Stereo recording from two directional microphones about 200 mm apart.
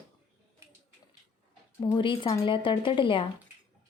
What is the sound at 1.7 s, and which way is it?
A woman's voice, 25° left (ahead or behind).